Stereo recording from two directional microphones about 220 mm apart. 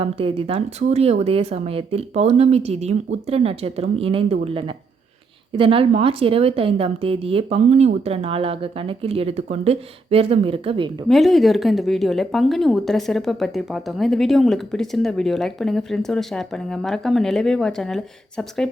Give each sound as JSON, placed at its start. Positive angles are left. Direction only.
{"t": 0.0, "sound": "a woman's voice", "side_deg": -25}
{"t": 11.1, "sound": "speech", "side_deg": 0}